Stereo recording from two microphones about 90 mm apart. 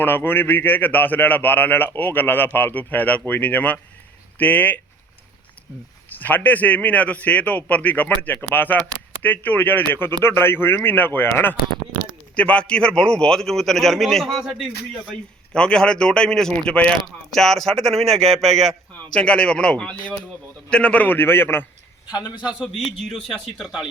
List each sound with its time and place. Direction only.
0.0 s a man's voice: 25° left (ahead or behind)
6.1 s a man's voice: 20° left (ahead or behind); by 14.5 s centre (ahead or behind)
15.5 s a man's voice: 10° left (ahead or behind); by 21.7 s 25° left (ahead or behind)
22.0 s a man's voice: 50° left (ahead or behind)
22.4 s a man's voice: 10° right (ahead or behind)
23.0 s speech: 5° left (ahead or behind)